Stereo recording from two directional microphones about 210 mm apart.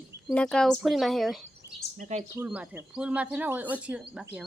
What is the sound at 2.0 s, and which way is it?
Speech, 35° right (ahead or behind).